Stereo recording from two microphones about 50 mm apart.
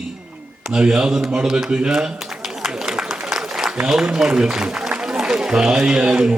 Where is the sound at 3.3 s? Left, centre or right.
Centre.